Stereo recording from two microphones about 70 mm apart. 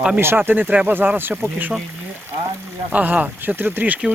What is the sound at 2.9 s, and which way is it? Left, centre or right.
Speech, centre.